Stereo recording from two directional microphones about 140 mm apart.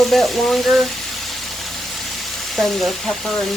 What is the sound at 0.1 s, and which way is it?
Speech, centre (ahead or behind).